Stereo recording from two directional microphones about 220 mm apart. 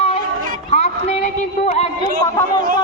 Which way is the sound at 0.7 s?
30° left (ahead or behind).